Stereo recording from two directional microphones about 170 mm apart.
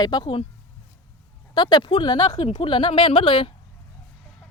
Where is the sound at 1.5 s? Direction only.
25° left (ahead or behind).